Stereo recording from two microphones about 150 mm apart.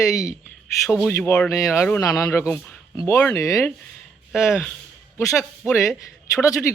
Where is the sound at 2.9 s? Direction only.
20° left (ahead or behind).